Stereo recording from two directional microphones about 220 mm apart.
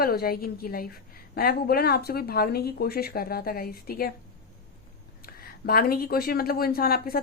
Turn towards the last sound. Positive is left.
turn(degrees=45)  # may be behind; listen again after turning